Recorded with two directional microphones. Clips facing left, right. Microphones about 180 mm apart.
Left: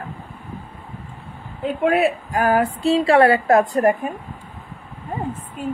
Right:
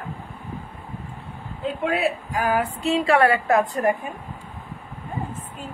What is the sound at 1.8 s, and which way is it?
Speech, 55° left (ahead or behind).